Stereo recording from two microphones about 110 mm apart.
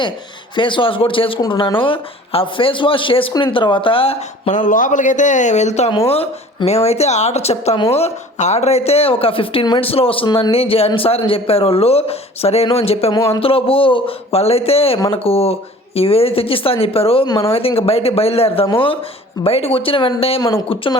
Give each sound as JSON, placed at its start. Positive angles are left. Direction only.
{"t": 0.5, "sound": "speech", "side_deg": 50}
{"t": 5.9, "sound": "speech", "side_deg": 60}
{"t": 6.7, "sound": "speech", "side_deg": 75}